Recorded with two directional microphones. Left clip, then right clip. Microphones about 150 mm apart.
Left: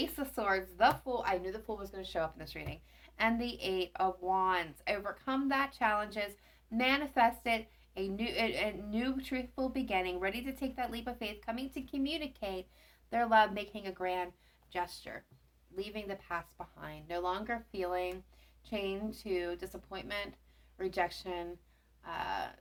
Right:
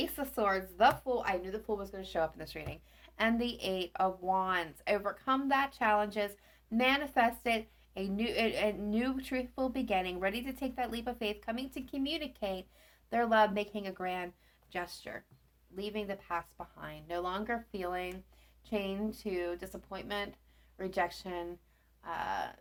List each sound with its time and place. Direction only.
0.0 s speech: 45° right (ahead or behind)
15.7 s speech: 35° right (ahead or behind)